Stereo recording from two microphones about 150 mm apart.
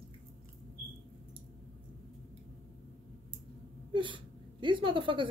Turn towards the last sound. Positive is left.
turn(degrees=-35)  # may be behind; listen again after turning